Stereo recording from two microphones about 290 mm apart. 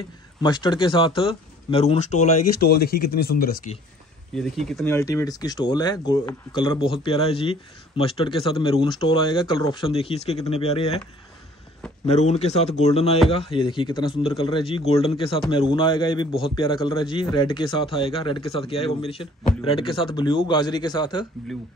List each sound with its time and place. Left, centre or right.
0.4 s speech: centre; by 3.5 s left
4.4 s speech: centre; by 11.0 s left
12.1 s speech: left